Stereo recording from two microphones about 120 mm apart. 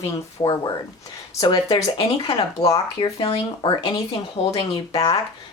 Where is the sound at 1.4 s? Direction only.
35° left (ahead or behind).